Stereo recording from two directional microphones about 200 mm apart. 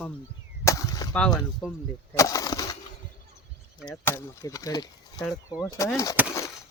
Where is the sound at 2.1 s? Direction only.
15° left (ahead or behind).